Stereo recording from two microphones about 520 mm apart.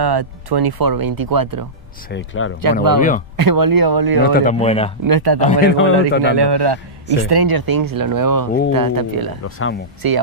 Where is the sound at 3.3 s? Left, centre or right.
Right.